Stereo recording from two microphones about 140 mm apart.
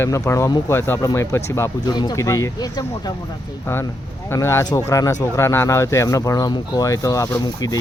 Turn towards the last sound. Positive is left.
turn(degrees=25)  # may be behind; listen again after turning